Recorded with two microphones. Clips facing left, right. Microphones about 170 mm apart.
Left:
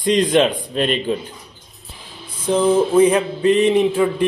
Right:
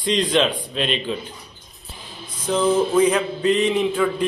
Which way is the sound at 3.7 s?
30° left (ahead or behind).